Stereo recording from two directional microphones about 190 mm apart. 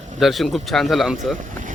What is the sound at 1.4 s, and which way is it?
Vehicle, 45° right (ahead or behind).